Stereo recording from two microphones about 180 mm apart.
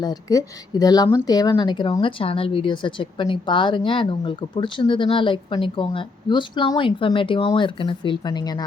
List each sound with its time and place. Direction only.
0.0 s speech: 20° left (ahead or behind)